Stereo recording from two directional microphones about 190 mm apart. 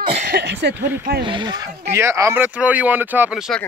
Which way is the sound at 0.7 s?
10° right (ahead or behind).